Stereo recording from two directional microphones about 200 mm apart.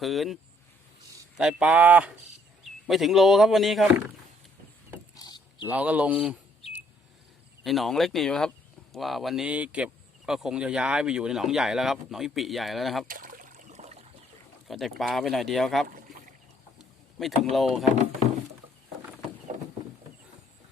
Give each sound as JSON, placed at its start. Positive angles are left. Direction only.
{"t": 0.0, "sound": "speech", "side_deg": 0}
{"t": 1.4, "sound": "speech", "side_deg": -5}
{"t": 5.1, "sound": "mechanisms", "side_deg": 20}
{"t": 5.6, "sound": "speech", "side_deg": -5}
{"t": 7.6, "sound": "speech", "side_deg": 0}
{"t": 13.1, "sound": "trickle", "side_deg": -45}
{"t": 14.7, "sound": "speech", "side_deg": 0}
{"t": 16.7, "sound": "a sound", "side_deg": 0}
{"t": 17.5, "sound": "speech", "side_deg": 0}
{"t": 19.5, "sound": "a sound", "side_deg": -40}